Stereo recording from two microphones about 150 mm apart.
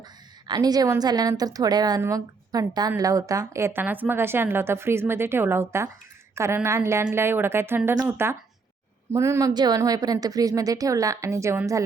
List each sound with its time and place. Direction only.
0.4 s a woman's voice: 25° right (ahead or behind)